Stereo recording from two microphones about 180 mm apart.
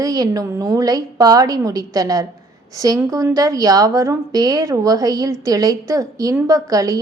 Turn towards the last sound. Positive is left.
turn(degrees=-20)  # may be behind; listen again after turning